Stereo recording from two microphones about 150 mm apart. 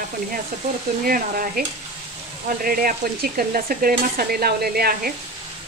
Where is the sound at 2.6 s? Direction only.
75° right (ahead or behind); by 5.1 s 90° right.